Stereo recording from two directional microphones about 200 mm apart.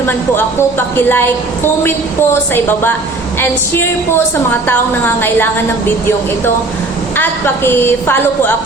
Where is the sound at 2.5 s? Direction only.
10° left (ahead or behind).